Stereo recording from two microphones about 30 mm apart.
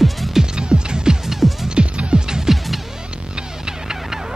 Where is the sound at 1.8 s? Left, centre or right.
Right.